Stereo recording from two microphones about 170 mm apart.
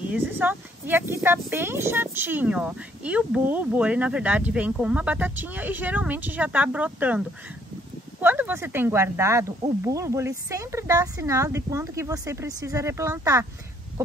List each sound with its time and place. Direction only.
0.1 s speech: 10° right (ahead or behind)